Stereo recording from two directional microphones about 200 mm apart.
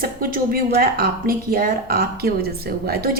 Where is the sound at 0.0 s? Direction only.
45° right (ahead or behind).